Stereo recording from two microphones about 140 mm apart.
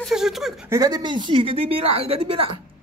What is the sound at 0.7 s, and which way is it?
A woman's voice, 25° right (ahead or behind).